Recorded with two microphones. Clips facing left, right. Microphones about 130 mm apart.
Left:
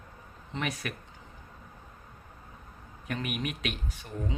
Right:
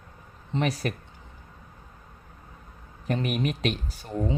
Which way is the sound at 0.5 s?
35° right (ahead or behind).